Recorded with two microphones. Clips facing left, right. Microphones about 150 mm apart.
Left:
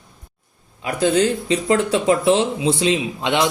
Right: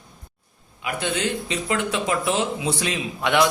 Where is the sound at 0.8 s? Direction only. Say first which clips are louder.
Left 8 dB; 35° left (ahead or behind).